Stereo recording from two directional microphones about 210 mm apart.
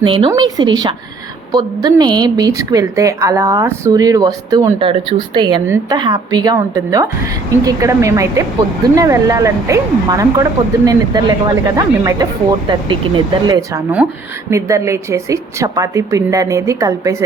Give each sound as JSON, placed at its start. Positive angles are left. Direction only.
{"t": 0.0, "sound": "a woman's voice", "side_deg": -25}